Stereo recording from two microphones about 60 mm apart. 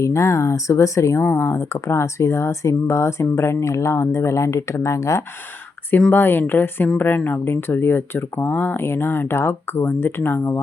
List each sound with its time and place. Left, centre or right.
0.0 s speech: left
1.2 s speech: left
1.7 s speech: left
6.1 s speech: left